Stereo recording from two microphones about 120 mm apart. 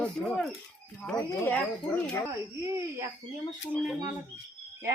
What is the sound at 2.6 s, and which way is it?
Speech, 25° right (ahead or behind).